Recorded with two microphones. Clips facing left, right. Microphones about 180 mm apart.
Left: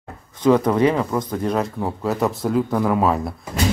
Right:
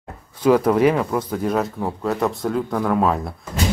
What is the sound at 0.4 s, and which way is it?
Speech, 5° right (ahead or behind).